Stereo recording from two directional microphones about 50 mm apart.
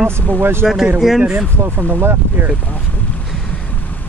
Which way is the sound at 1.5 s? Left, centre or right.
Right.